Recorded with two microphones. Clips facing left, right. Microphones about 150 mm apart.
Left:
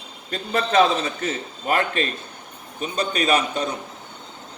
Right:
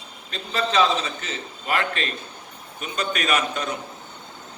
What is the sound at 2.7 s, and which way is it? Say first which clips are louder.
Speech: left 3 dB; 35° left (ahead or behind).